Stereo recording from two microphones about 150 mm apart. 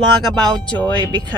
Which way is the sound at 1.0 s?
25° right (ahead or behind).